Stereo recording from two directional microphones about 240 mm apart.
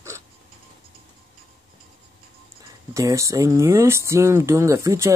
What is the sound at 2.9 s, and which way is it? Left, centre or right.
Speech, centre.